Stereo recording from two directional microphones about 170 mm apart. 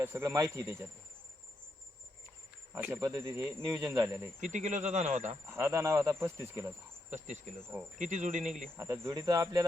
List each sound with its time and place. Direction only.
0.0 s speech: 15° right (ahead or behind)
2.7 s speech: 10° right (ahead or behind)
4.4 s speech: 45° right (ahead or behind)
5.5 s speech: 15° right (ahead or behind)
7.1 s speech: 45° right (ahead or behind)
8.7 s speech: 15° right (ahead or behind)